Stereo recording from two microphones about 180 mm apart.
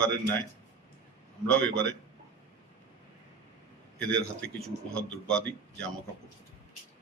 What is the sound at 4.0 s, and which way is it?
Speech, 5° left (ahead or behind).